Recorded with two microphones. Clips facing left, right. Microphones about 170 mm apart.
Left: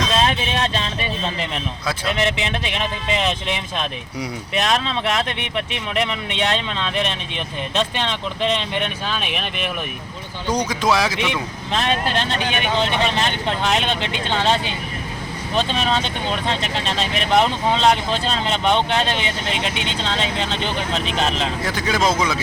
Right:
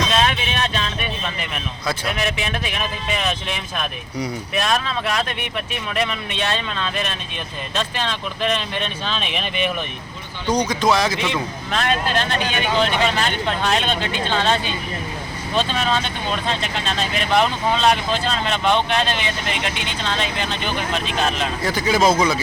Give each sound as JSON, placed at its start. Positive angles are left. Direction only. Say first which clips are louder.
{"t": 0.3, "sound": "vehicle", "louder": "left 2 dB", "side_deg": 30}
{"t": 1.2, "sound": "speech", "louder": "left 3 dB", "side_deg": 25}
{"t": 9.0, "sound": "speech", "louder": "even", "side_deg": 5}
{"t": 11.2, "sound": "speech", "louder": "even", "side_deg": 15}
{"t": 21.6, "sound": "speech", "louder": "right 4 dB", "side_deg": 0}